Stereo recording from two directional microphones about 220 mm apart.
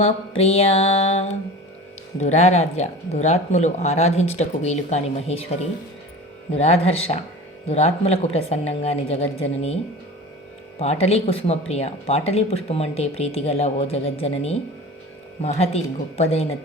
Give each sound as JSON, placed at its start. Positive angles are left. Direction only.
{"t": 0.0, "sound": "speech", "side_deg": 25}
{"t": 6.5, "sound": "speech", "side_deg": 30}
{"t": 10.8, "sound": "speech", "side_deg": 30}
{"t": 15.4, "sound": "speech", "side_deg": 30}